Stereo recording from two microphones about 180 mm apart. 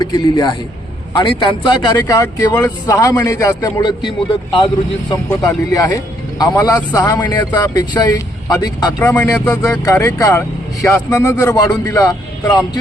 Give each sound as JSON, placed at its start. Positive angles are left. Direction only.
{"t": 0.0, "sound": "a man's voice", "side_deg": 25}